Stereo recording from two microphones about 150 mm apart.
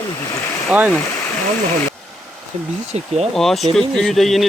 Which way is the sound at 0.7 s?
10° right (ahead or behind).